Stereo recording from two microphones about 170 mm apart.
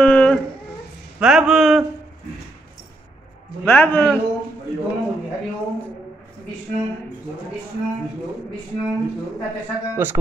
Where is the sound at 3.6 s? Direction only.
10° left (ahead or behind).